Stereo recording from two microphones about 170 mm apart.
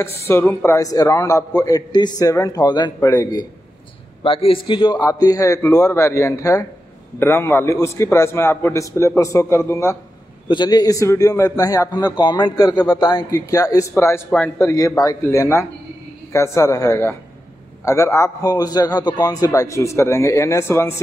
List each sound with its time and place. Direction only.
0.3 s a man's voice: 15° left (ahead or behind)
4.2 s a man's voice: 30° left (ahead or behind); by 20.9 s 15° left (ahead or behind)